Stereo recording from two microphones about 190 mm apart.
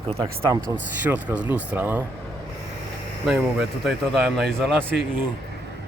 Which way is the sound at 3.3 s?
5° right (ahead or behind).